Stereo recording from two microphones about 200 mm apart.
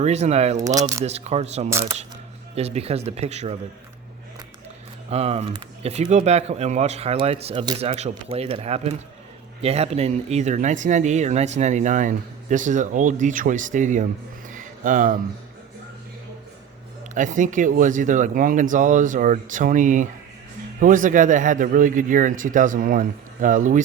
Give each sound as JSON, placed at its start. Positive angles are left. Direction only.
{"t": 0.0, "sound": "speech", "side_deg": -35}
{"t": 0.5, "sound": "speech", "side_deg": -15}
{"t": 1.0, "sound": "speech", "side_deg": -30}
{"t": 5.1, "sound": "speech", "side_deg": -30}
{"t": 14.5, "sound": "music", "side_deg": -40}
{"t": 17.2, "sound": "speech", "side_deg": -40}